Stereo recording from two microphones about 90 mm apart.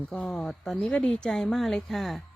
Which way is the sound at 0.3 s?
5° left (ahead or behind).